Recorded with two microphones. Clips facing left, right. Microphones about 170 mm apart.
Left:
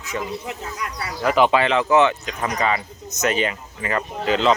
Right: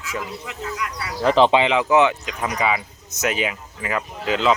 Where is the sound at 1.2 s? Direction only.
30° right (ahead or behind).